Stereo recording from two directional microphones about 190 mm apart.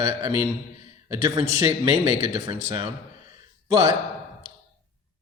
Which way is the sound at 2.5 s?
25° right (ahead or behind).